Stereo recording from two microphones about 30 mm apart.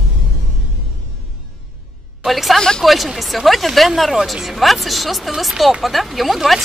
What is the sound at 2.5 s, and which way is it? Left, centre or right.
Speech, left.